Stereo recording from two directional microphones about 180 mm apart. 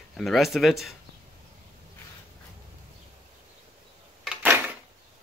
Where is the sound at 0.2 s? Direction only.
Centre (ahead or behind).